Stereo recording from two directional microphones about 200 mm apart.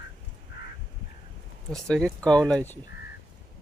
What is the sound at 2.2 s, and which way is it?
Speech, 5° left (ahead or behind).